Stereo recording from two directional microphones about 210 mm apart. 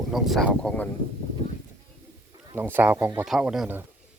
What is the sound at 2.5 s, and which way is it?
Speech, 10° right (ahead or behind).